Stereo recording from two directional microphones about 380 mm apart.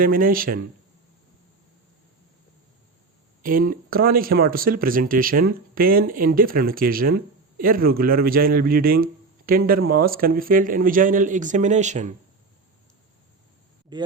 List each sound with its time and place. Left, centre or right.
0.0 s speech: right
3.4 s speech: right
13.9 s speech: centre